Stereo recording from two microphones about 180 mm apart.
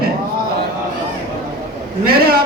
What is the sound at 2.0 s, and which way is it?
Speech, 60° right (ahead or behind).